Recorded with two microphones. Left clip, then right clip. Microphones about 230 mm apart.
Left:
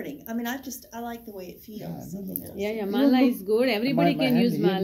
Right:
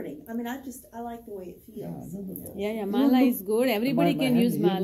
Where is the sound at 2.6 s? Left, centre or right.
Centre.